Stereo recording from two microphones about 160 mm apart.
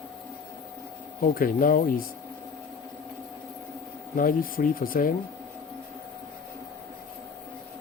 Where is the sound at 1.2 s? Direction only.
60° left (ahead or behind).